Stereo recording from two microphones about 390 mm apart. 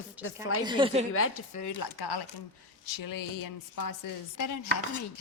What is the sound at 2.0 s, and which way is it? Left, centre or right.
Speech, left.